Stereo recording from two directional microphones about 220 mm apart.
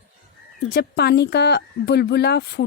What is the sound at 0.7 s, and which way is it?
A woman's voice, 45° left (ahead or behind).